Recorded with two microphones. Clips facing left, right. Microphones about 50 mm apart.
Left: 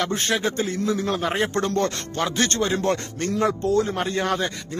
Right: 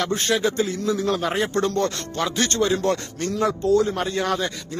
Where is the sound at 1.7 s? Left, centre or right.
Left.